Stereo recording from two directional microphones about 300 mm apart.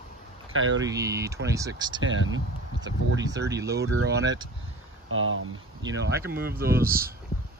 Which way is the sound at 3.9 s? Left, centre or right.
Right.